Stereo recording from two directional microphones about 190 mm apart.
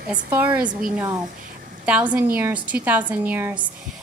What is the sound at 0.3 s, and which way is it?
Speech, 10° right (ahead or behind).